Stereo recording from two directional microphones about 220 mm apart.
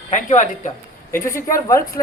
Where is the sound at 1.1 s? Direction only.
10° left (ahead or behind).